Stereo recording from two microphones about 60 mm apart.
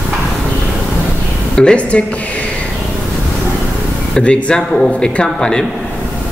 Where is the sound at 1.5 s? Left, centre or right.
Centre.